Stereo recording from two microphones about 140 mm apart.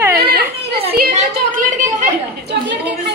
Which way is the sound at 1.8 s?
65° right (ahead or behind).